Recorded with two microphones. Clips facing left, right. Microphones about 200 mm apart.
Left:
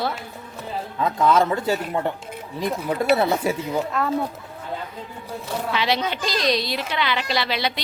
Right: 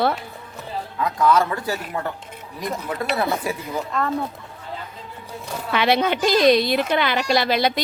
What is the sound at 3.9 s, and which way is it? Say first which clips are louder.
Speech: right 4 dB; 5° left (ahead or behind).